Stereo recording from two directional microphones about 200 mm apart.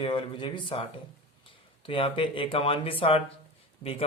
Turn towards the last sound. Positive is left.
turn(degrees=30)  # may be behind; listen again after turning